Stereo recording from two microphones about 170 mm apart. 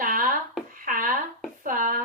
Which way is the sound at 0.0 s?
55° right (ahead or behind).